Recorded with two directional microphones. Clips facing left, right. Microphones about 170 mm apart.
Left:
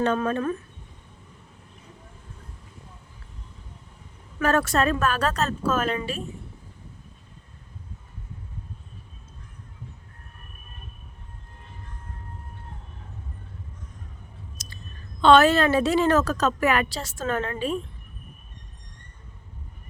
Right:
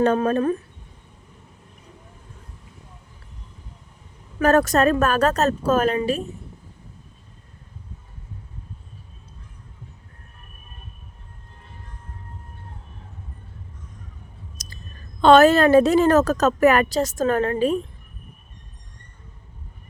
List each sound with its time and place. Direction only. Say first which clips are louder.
0.0 s a woman's voice: right 5 dB; 40° right (ahead or behind)
4.4 s a woman's voice: right 5 dB; 40° right (ahead or behind)
14.6 s a sound: even; 40° right (ahead or behind)
15.2 s a woman's voice: right 4 dB; 45° right (ahead or behind)